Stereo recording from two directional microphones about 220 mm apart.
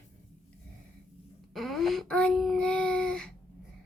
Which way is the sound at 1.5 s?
Centre (ahead or behind).